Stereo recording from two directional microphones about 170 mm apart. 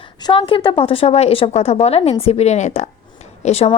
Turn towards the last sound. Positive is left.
turn(degrees=35)  # may be behind; listen again after turning